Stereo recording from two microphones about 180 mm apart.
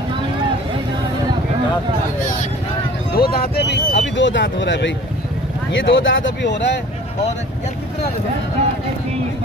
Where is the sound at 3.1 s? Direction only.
55° left (ahead or behind); by 6.7 s 75° left (ahead or behind).